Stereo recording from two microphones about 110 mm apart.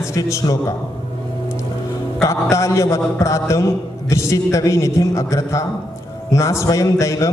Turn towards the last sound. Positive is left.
turn(degrees=30)  # may be behind; listen again after turning